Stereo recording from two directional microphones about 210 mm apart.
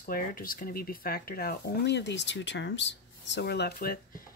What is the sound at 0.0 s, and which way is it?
Speech, 40° left (ahead or behind).